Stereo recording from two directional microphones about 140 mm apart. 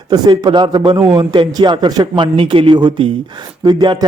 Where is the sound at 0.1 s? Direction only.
30° right (ahead or behind).